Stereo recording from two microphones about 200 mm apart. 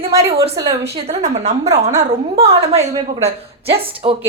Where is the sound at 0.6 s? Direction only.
20° right (ahead or behind).